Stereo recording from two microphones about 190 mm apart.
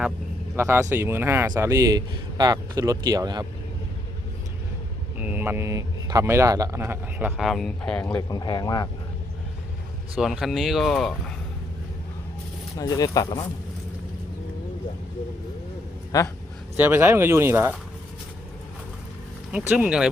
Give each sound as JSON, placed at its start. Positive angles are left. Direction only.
{"t": 0.5, "sound": "speech", "side_deg": -15}
{"t": 5.2, "sound": "speech", "side_deg": -10}
{"t": 8.1, "sound": "speech", "side_deg": 25}
{"t": 10.2, "sound": "speech", "side_deg": 0}
{"t": 12.8, "sound": "speech", "side_deg": 20}
{"t": 16.1, "sound": "a man's voice", "side_deg": 15}
{"t": 16.7, "sound": "speech", "side_deg": -10}
{"t": 19.5, "sound": "speech", "side_deg": -5}